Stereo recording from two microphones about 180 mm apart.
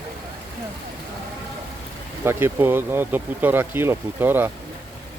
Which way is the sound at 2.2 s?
10° right (ahead or behind).